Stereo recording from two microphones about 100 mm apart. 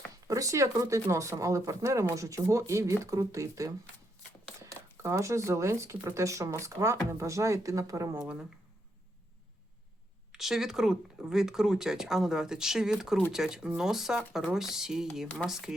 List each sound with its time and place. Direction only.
0.3 s speech: 35° right (ahead or behind)
8.2 s speech: 5° right (ahead or behind)
10.3 s speech: 5° right (ahead or behind)